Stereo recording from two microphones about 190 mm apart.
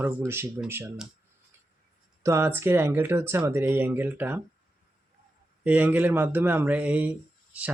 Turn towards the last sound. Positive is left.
turn(degrees=-5)  # may be behind; listen again after turning